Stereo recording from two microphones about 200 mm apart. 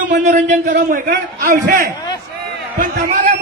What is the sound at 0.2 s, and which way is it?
A man's voice, 40° right (ahead or behind).